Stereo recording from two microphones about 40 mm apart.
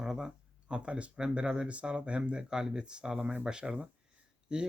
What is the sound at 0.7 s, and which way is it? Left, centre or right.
Speech, right.